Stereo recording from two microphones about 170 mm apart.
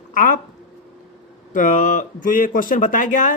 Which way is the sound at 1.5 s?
50° left (ahead or behind).